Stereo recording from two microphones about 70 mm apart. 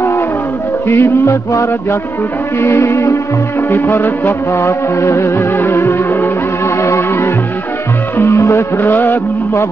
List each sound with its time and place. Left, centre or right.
0.8 s music: left
1.5 s music: left
3.7 s music: left
4.6 s music: left
6.8 s music: left
8.4 s music: left
8.7 s music: left